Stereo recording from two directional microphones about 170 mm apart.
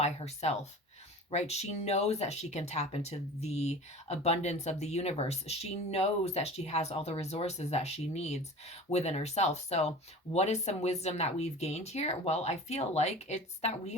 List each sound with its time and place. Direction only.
0.0 s speech: 40° left (ahead or behind)